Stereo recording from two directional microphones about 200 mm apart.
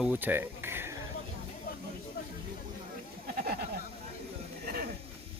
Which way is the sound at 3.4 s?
50° right (ahead or behind).